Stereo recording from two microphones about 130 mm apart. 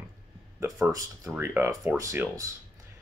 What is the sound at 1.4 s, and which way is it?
Speech, 20° right (ahead or behind).